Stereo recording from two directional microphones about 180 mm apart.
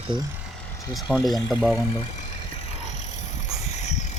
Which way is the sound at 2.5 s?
35° left (ahead or behind).